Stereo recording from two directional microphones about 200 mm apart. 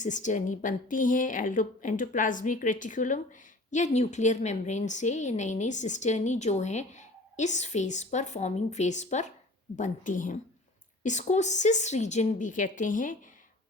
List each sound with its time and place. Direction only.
0.0 s a woman's voice: 40° left (ahead or behind)